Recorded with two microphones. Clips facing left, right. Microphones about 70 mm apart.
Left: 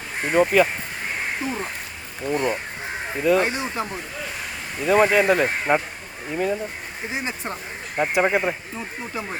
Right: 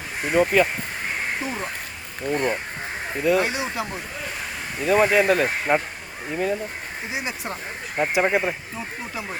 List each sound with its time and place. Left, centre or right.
0.3 s speech: centre
2.2 s speech: right
3.2 s speech: centre
3.4 s speech: left
4.8 s speech: centre
7.1 s speech: left
7.9 s speech: centre